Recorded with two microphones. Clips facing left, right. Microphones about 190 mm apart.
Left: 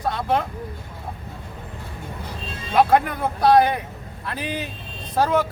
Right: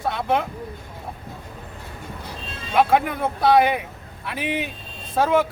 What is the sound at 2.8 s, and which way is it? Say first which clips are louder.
Speech: left 1 dB; 5° right (ahead or behind).